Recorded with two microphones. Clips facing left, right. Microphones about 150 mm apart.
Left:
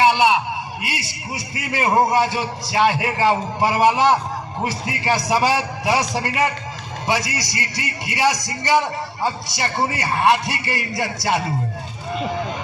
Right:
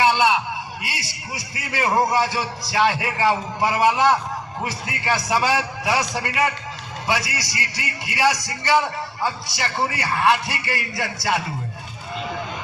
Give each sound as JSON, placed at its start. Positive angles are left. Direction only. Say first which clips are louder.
{"t": 0.8, "sound": "a man's voice", "louder": "left 4 dB", "side_deg": 25}